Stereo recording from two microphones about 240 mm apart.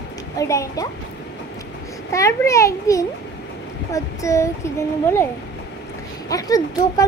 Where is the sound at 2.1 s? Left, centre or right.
Centre.